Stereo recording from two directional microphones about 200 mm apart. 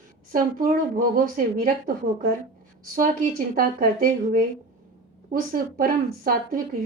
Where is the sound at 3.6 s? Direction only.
45° right (ahead or behind).